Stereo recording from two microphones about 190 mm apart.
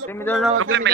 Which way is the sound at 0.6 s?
70° right (ahead or behind).